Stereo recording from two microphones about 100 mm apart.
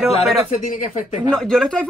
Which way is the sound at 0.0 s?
Centre (ahead or behind).